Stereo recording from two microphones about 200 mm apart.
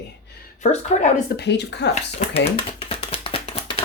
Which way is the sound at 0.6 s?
35° left (ahead or behind).